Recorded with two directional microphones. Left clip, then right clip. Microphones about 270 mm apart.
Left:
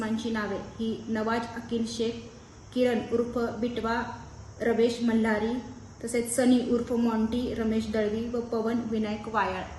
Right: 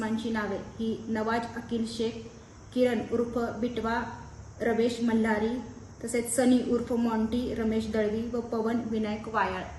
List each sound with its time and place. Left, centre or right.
0.0 s a woman's voice: centre